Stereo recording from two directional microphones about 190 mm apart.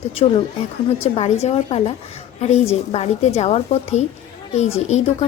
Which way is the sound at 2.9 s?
35° left (ahead or behind).